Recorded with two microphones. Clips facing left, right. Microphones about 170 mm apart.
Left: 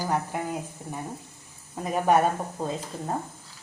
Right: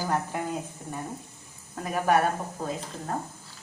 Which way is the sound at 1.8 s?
20° left (ahead or behind).